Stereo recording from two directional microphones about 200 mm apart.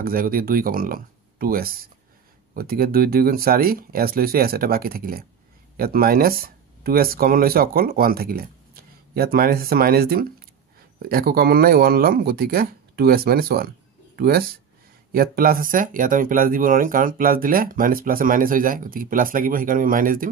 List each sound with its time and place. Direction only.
0.0 s speech: 45° right (ahead or behind)